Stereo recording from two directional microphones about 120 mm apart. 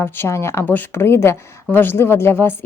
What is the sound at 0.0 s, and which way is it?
A woman's voice, 20° left (ahead or behind).